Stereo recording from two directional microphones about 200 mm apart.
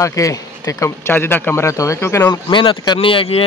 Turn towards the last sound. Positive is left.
turn(degrees=25)  # may be behind; listen again after turning